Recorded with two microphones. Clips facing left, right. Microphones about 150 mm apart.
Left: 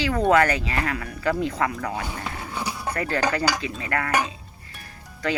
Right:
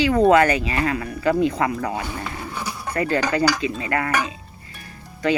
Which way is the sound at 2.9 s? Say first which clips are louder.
Right 4 dB; 10° right (ahead or behind).